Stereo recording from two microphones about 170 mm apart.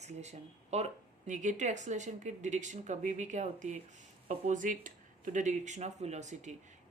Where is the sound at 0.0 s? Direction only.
40° right (ahead or behind).